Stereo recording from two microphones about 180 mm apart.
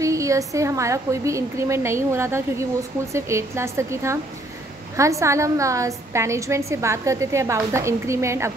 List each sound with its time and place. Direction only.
0.0 s a woman's voice: 15° right (ahead or behind)